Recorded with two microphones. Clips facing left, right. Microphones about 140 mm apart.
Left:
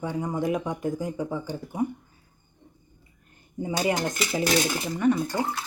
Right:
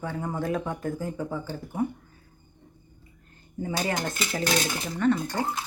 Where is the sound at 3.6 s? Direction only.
15° left (ahead or behind).